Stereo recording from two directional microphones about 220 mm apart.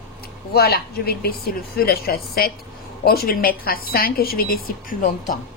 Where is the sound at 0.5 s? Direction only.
45° left (ahead or behind).